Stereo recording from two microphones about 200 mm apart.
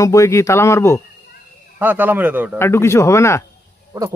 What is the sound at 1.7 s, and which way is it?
Speech, 10° right (ahead or behind).